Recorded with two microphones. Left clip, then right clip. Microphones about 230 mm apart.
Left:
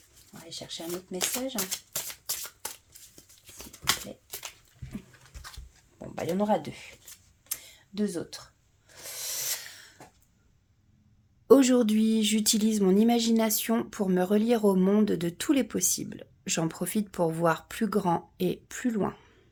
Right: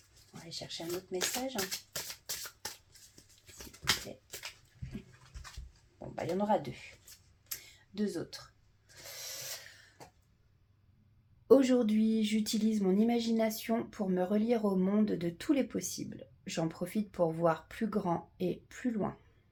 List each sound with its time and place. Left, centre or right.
1.1 s speech: left
1.5 s music: centre
3.8 s a sound: left
6.1 s speech: left
7.4 s a sound: left
11.4 s speech: left